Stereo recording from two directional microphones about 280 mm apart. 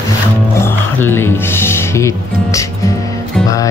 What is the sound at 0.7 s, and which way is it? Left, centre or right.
Speech, centre.